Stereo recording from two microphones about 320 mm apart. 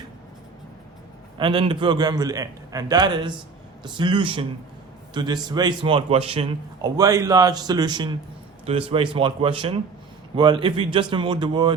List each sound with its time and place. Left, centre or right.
1.4 s a man's voice: centre